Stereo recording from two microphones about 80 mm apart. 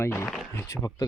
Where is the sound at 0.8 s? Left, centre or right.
Left.